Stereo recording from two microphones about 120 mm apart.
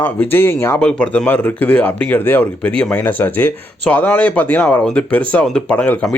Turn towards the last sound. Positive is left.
turn(degrees=10)  # may be behind; listen again after turning